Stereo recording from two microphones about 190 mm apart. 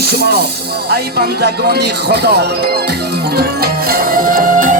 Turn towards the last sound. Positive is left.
turn(degrees=-45)  # may be behind; listen again after turning